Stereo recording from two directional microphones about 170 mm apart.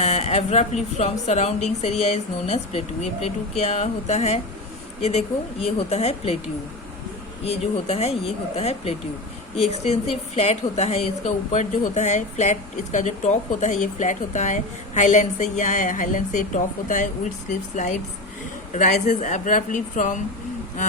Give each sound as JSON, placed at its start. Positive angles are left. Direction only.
{"t": 0.0, "sound": "speech", "side_deg": 40}
{"t": 7.4, "sound": "a woman's voice", "side_deg": 35}